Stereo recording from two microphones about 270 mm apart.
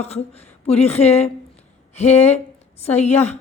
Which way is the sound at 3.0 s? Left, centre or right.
Left.